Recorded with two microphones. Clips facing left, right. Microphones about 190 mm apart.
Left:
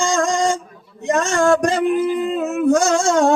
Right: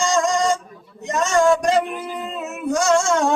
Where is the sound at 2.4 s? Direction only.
50° left (ahead or behind).